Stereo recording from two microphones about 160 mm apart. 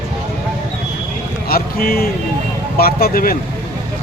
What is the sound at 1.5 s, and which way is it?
Speech, 70° left (ahead or behind).